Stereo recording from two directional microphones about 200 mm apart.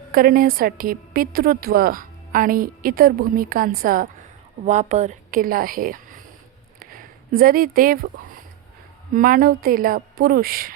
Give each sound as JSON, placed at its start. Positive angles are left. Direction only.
{"t": 0.1, "sound": "a woman's voice", "side_deg": -45}
{"t": 6.7, "sound": "a sound", "side_deg": -45}
{"t": 9.1, "sound": "a woman's voice", "side_deg": -45}